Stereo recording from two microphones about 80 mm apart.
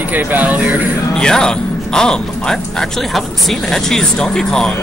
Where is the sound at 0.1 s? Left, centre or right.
Right.